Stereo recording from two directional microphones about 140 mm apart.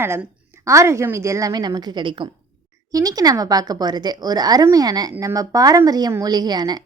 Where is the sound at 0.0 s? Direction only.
15° right (ahead or behind).